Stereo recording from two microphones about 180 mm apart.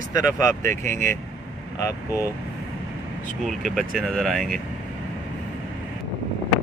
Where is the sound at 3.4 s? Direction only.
Centre (ahead or behind).